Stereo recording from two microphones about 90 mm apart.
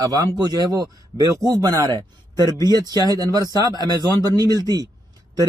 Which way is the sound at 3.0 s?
45° right (ahead or behind).